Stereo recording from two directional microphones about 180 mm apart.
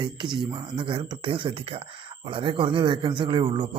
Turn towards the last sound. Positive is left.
turn(degrees=-25)  # may be behind; listen again after turning